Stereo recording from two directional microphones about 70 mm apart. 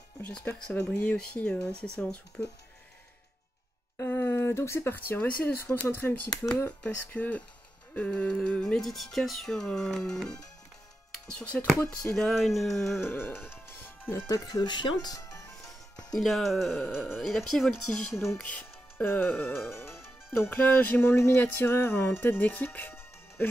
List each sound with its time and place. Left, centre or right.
0.2 s speech: centre
4.0 s a sound: left
4.9 s speech: left
8.8 s speech: centre
11.3 s speech: centre
12.4 s speech: centre
13.0 s music: left
14.4 s speech: left
15.3 s music: left
16.1 s speech: centre
18.1 s music: left
18.4 s music: centre; by 19.9 s left
20.3 s speech: left
21.4 s music: left